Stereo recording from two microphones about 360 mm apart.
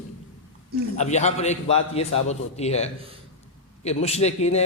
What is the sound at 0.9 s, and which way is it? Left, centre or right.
A man's voice, centre.